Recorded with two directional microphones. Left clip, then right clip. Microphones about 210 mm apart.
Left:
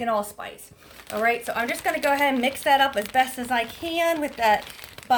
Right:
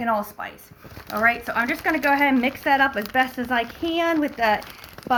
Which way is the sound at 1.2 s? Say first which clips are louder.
Right 3 dB; 60° left (ahead or behind).